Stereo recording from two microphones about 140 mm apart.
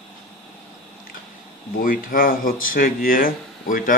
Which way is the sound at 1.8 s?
90° left.